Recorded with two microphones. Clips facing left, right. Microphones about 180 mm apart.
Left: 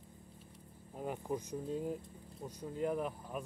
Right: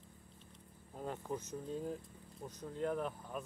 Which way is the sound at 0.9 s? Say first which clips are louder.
Left 3 dB; 10° left (ahead or behind).